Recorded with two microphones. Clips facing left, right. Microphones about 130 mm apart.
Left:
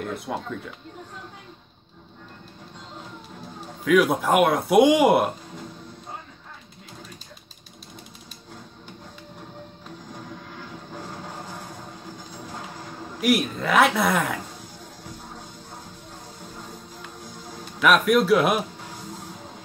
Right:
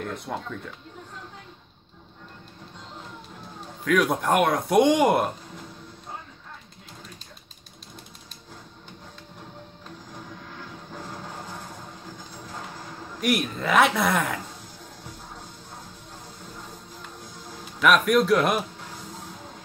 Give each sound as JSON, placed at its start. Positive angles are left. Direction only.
{"t": 0.0, "sound": "speech", "side_deg": 5}
{"t": 3.8, "sound": "speech", "side_deg": 5}
{"t": 13.2, "sound": "speech", "side_deg": 0}
{"t": 17.7, "sound": "speech", "side_deg": 0}